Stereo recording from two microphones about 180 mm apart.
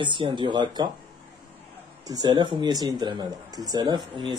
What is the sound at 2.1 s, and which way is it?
Speech, 20° right (ahead or behind).